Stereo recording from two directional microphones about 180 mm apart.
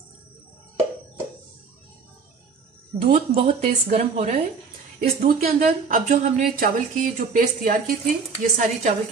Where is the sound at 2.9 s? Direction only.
45° right (ahead or behind).